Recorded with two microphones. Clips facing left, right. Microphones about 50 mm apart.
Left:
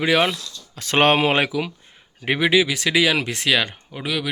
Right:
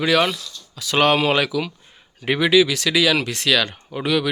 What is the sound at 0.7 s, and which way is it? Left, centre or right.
Speech, left.